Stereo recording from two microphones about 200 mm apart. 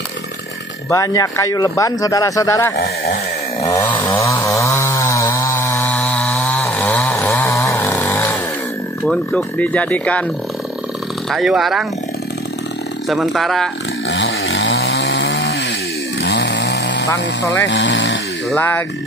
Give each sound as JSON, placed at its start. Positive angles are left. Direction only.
{"t": 0.8, "sound": "speech", "side_deg": 15}
{"t": 3.7, "sound": "chainsaw", "side_deg": 10}
{"t": 9.0, "sound": "speech", "side_deg": 5}
{"t": 11.2, "sound": "speech", "side_deg": 0}
{"t": 13.1, "sound": "speech", "side_deg": 0}
{"t": 14.0, "sound": "chainsaw", "side_deg": 70}
{"t": 17.6, "sound": "speech", "side_deg": 65}
{"t": 18.5, "sound": "speech", "side_deg": 10}